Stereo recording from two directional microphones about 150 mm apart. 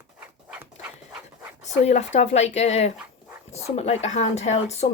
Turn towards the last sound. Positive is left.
turn(degrees=45)  # may be behind; listen again after turning